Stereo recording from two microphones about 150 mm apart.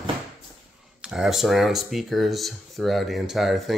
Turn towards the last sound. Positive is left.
turn(degrees=0)  # may be behind; listen again after turning